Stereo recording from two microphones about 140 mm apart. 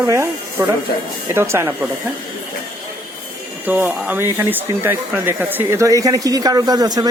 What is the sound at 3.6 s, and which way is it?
Speech, 15° right (ahead or behind).